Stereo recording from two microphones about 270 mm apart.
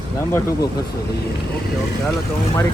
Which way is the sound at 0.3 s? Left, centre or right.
Centre.